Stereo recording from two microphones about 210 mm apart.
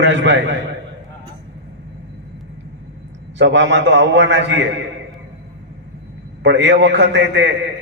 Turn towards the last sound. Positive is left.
turn(degrees=-60)  # may be behind; listen again after turning